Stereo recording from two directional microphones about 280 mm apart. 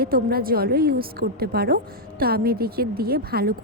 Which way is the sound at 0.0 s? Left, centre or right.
Right.